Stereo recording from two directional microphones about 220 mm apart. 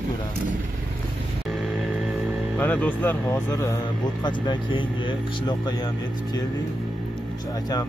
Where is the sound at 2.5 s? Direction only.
5° left (ahead or behind).